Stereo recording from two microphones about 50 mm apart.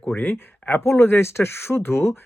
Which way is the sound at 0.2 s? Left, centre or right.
Left.